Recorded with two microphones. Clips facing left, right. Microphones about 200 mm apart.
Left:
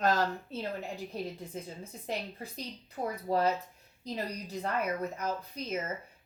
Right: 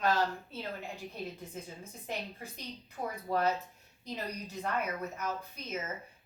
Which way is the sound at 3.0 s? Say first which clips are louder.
Left 3 dB; 35° left (ahead or behind).